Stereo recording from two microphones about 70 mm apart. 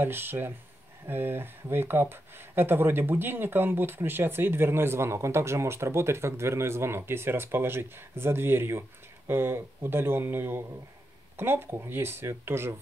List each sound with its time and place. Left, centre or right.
0.0 s speech: right